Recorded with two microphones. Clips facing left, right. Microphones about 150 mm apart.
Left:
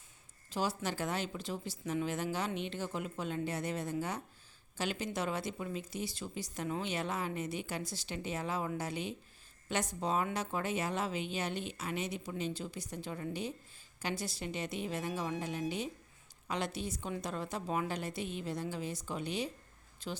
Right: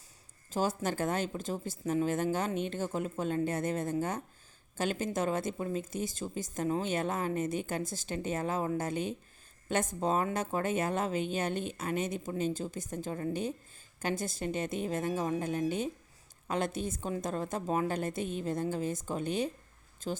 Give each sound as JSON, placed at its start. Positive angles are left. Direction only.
{"t": 0.5, "sound": "a woman's voice", "side_deg": -45}